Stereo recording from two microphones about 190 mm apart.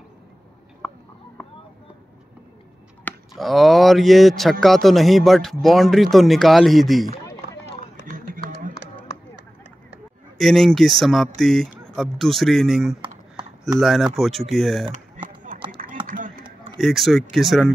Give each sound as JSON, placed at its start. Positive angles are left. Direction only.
{"t": 0.8, "sound": "a sound", "side_deg": 10}
{"t": 3.1, "sound": "speech", "side_deg": 0}
{"t": 10.4, "sound": "speech", "side_deg": 0}
{"t": 15.2, "sound": "run", "side_deg": -45}
{"t": 16.7, "sound": "speech", "side_deg": 0}